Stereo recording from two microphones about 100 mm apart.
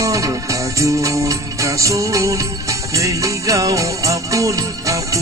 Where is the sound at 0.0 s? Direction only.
35° right (ahead or behind).